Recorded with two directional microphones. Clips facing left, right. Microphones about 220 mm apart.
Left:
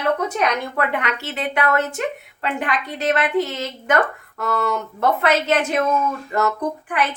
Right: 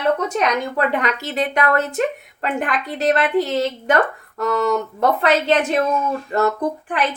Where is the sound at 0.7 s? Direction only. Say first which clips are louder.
Right 3 dB; 40° right (ahead or behind).